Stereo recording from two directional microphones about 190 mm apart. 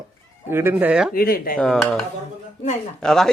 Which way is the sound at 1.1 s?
50° left (ahead or behind).